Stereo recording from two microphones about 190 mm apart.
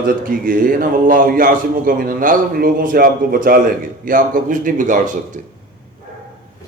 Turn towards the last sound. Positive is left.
turn(degrees=-45)  # may be behind; listen again after turning